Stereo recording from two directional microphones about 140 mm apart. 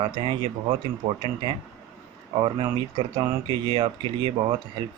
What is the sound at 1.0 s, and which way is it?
Speech, 50° right (ahead or behind).